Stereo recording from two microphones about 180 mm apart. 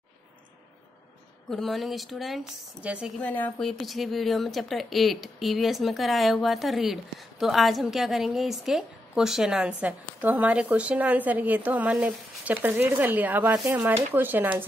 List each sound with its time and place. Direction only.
1.5 s a woman's voice: centre (ahead or behind)
3.2 s a woman's voice: 10° left (ahead or behind); by 14.5 s 10° right (ahead or behind)